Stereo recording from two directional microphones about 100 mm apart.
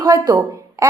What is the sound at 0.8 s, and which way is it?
Babbling, 35° right (ahead or behind).